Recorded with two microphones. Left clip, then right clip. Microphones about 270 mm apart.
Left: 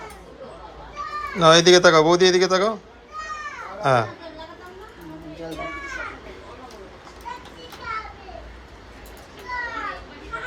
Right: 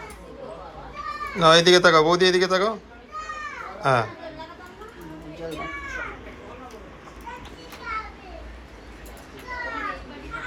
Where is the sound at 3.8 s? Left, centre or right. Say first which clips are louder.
Left 2 dB; centre.